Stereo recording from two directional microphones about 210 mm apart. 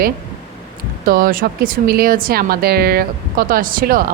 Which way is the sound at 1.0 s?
45° right (ahead or behind).